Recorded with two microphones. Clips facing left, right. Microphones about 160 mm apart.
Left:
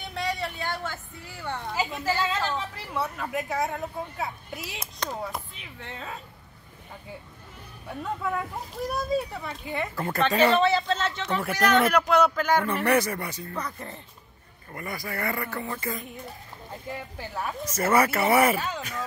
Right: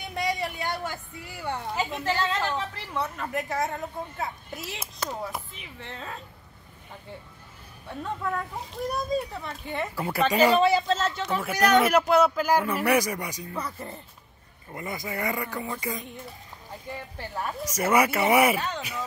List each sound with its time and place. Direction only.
0.0 s vehicle: 15° right (ahead or behind)
1.7 s a woman's voice: centre (ahead or behind)
7.9 s speech: 5° left (ahead or behind)
14.7 s speech: 20° right (ahead or behind)
17.2 s a woman's voice: 5° left (ahead or behind)
17.6 s speech: 10° right (ahead or behind)